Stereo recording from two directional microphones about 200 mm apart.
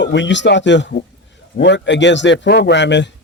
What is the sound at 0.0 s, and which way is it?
Speech, 65° left (ahead or behind).